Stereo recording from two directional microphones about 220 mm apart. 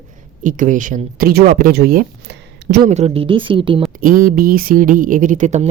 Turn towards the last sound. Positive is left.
turn(degrees=-30)  # may be behind; listen again after turning